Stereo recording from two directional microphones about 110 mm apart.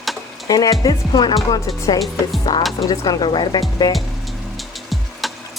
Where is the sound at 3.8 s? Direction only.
35° left (ahead or behind).